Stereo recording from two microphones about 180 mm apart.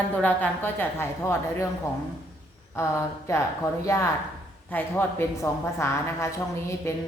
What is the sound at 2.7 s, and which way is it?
A woman's voice, 15° left (ahead or behind).